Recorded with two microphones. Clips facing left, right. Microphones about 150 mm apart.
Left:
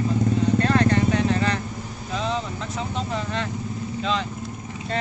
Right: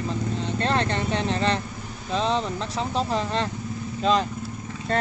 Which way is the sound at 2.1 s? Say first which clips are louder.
Right 3 dB; 30° right (ahead or behind).